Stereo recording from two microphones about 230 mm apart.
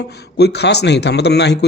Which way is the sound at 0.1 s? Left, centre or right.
Left.